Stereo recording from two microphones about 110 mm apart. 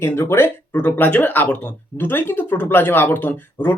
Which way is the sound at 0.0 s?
25° left (ahead or behind).